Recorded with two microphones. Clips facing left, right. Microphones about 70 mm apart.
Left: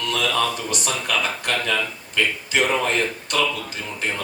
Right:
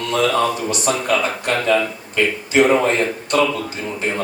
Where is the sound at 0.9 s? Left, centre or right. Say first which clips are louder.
Right 6 dB; right.